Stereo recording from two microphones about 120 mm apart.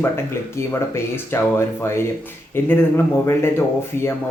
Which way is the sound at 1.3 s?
20° left (ahead or behind).